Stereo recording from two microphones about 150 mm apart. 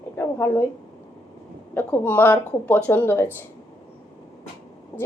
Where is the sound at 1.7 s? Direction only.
10° left (ahead or behind).